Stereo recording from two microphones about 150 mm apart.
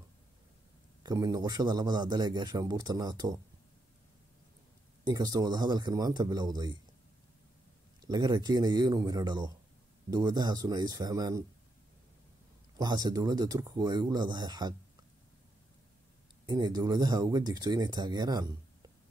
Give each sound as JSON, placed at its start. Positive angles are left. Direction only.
{"t": 1.0, "sound": "a man's voice", "side_deg": -25}
{"t": 5.0, "sound": "a man's voice", "side_deg": -25}
{"t": 8.0, "sound": "a man's voice", "side_deg": -30}
{"t": 12.7, "sound": "a man's voice", "side_deg": -25}
{"t": 16.4, "sound": "a man's voice", "side_deg": -30}